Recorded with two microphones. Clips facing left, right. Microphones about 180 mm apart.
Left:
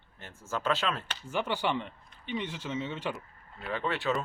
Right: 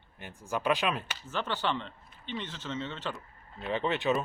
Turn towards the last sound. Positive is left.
turn(degrees=-20)  # may be behind; listen again after turning